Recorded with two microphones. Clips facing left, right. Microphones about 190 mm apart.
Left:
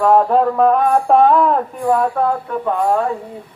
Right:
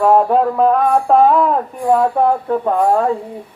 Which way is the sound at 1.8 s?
20° right (ahead or behind).